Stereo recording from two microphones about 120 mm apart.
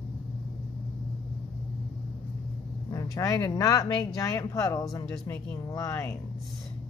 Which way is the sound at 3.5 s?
30° left (ahead or behind).